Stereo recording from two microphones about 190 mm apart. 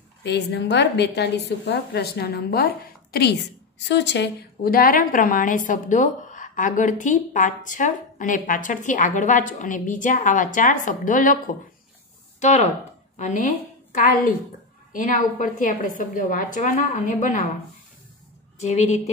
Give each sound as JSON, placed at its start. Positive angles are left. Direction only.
{"t": 0.2, "sound": "a woman's voice", "side_deg": 65}
{"t": 3.8, "sound": "a woman's voice", "side_deg": 65}
{"t": 14.9, "sound": "a woman's voice", "side_deg": 45}
{"t": 18.6, "sound": "a woman's voice", "side_deg": 35}